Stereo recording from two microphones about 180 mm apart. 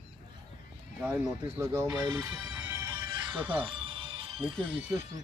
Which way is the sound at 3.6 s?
30° right (ahead or behind).